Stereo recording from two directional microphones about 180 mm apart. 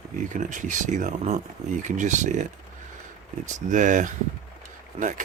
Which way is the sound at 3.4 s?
45° right (ahead or behind).